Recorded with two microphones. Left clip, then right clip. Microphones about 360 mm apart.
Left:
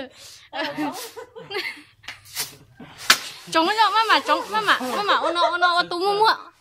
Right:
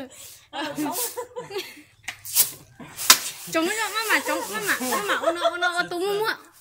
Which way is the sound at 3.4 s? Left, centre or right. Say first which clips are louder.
Left 7 dB; centre.